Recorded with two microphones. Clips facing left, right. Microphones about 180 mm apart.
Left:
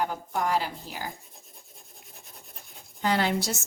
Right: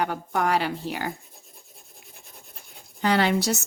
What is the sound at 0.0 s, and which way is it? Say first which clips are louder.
A woman's voice: right 3 dB; 70° right (ahead or behind).